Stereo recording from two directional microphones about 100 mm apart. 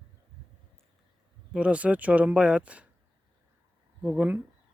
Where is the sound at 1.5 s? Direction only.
10° right (ahead or behind).